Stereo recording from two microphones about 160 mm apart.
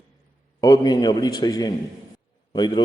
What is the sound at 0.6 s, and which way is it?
A man's voice, 20° left (ahead or behind).